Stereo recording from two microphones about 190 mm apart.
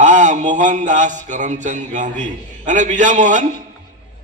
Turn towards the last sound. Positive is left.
turn(degrees=-40)  # may be behind; listen again after turning